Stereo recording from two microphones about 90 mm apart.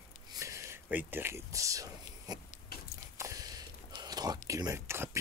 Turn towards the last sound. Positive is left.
turn(degrees=-30)  # may be behind; listen again after turning